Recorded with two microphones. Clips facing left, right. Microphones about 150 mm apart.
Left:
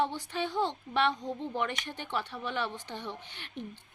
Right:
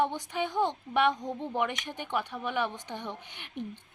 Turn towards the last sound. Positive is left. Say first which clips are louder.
# right 3 dB
turn(degrees=-15)  # may be behind; listen again after turning